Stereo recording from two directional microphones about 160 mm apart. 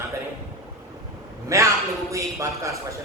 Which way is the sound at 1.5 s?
20° right (ahead or behind).